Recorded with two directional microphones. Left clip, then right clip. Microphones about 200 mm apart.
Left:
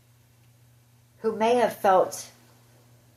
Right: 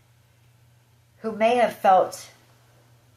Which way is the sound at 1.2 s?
45° left (ahead or behind).